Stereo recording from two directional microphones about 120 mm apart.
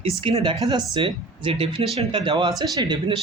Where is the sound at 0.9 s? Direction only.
45° right (ahead or behind).